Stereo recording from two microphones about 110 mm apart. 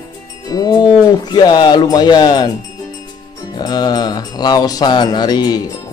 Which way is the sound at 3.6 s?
40° left (ahead or behind).